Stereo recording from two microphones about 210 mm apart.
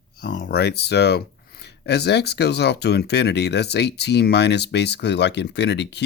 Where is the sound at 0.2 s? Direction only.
45° left (ahead or behind).